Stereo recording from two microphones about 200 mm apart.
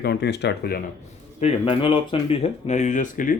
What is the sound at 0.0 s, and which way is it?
Speech, 55° left (ahead or behind).